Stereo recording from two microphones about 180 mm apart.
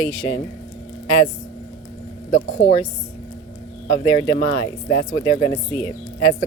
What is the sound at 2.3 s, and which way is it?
Speech, 35° left (ahead or behind).